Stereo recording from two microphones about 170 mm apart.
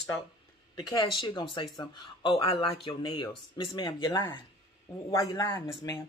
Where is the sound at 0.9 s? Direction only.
25° left (ahead or behind).